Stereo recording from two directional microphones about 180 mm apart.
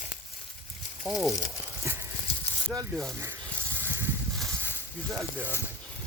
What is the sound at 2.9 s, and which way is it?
Speech, centre (ahead or behind).